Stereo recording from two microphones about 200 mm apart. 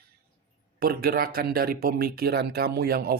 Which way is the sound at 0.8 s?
50° right (ahead or behind).